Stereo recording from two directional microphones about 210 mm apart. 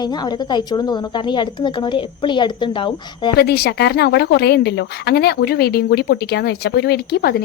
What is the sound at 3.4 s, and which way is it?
A woman's voice, 50° left (ahead or behind).